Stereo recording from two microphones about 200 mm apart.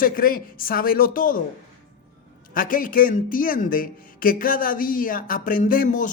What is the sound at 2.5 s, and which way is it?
Speech, 45° left (ahead or behind).